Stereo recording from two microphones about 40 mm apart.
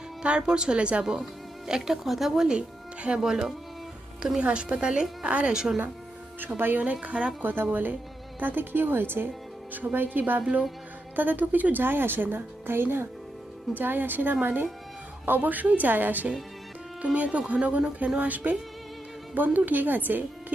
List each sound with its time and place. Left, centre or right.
0.2 s speech: right
1.0 s speech: centre
2.5 s speech: right
3.2 s speech: centre
4.4 s speech: right
5.5 s speech: centre
6.5 s speech: right
7.4 s speech: right
7.7 s a woman's voice: right
9.7 s a woman's voice: right
13.7 s a woman's voice: right
15.4 s a woman's voice: right
17.2 s speech: right
18.2 s a woman's voice: right